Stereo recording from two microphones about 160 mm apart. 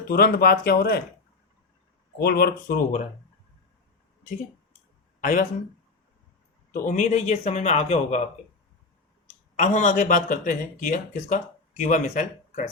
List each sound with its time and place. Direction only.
0.1 s speech: 70° left (ahead or behind)
2.1 s speech: 80° left; by 3.0 s 60° left (ahead or behind)
5.2 s speech: 55° left (ahead or behind)
6.7 s speech: 55° left (ahead or behind)
9.6 s speech: 50° left (ahead or behind)